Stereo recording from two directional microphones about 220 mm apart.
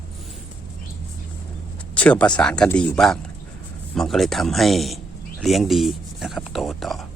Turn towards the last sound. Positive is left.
turn(degrees=0)  # may be behind; listen again after turning